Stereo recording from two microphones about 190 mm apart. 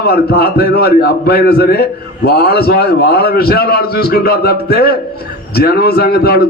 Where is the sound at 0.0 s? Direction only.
55° left (ahead or behind).